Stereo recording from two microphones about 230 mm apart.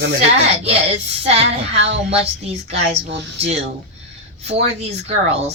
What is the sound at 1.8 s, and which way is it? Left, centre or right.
Speech, right.